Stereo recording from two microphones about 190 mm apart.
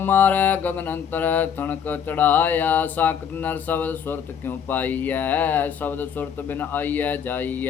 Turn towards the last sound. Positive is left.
turn(degrees=10)  # may be behind; listen again after turning